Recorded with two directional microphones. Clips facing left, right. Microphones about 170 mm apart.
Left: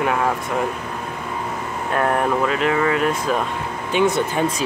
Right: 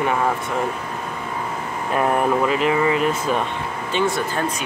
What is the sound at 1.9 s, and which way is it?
Speech, 5° right (ahead or behind).